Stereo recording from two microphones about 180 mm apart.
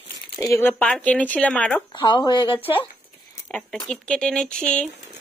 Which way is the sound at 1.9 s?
25° left (ahead or behind).